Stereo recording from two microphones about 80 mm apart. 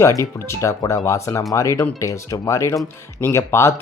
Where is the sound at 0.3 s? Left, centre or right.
Left.